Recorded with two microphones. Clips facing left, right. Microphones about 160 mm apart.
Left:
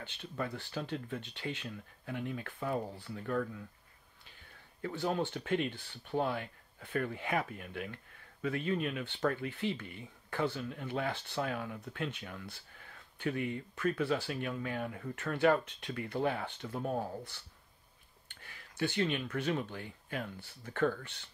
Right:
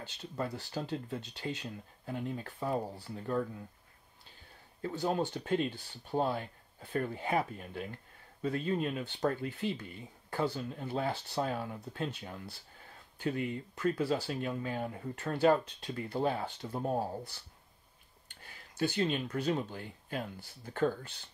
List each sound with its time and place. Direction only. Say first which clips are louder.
0.0 s speech: right 1 dB; 35° right (ahead or behind)
4.8 s speech: right 1 dB; 40° right (ahead or behind)
18.4 s speech: right 2 dB; 35° right (ahead or behind)